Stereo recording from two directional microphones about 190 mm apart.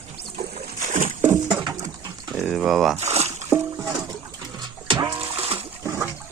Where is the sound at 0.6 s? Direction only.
40° right (ahead or behind).